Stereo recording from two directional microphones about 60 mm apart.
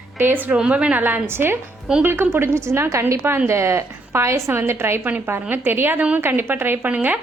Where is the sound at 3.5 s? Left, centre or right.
Right.